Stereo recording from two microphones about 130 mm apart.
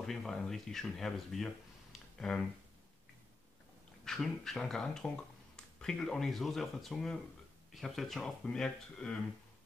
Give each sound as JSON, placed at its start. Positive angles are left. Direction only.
{"t": 0.0, "sound": "speech", "side_deg": 5}
{"t": 4.0, "sound": "speech", "side_deg": 0}